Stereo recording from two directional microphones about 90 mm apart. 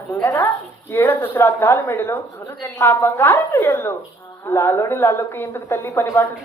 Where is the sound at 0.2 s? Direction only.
30° left (ahead or behind).